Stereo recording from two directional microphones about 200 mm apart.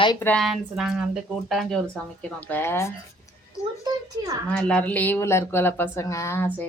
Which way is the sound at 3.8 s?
20° right (ahead or behind).